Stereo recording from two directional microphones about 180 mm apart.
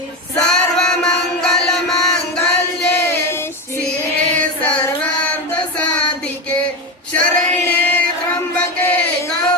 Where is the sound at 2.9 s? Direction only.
15° left (ahead or behind).